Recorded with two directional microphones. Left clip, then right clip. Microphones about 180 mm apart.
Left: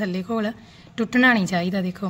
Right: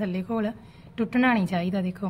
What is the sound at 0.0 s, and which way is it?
A woman's voice, 25° left (ahead or behind).